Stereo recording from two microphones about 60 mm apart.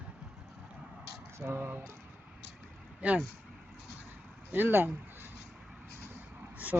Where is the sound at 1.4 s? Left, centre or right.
Right.